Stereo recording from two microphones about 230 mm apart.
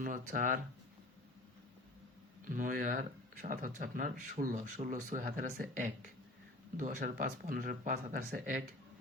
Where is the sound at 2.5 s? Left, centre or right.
Right.